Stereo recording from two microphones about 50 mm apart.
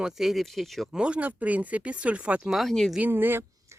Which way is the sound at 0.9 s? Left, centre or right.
Centre.